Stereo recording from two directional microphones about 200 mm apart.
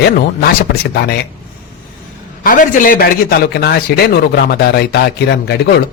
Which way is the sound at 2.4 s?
40° left (ahead or behind).